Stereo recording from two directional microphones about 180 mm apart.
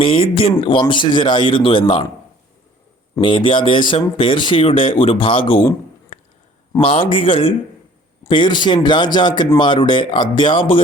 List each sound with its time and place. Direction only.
0.0 s speech: 30° left (ahead or behind)
3.2 s speech: 30° left (ahead or behind)
6.7 s speech: 30° left (ahead or behind)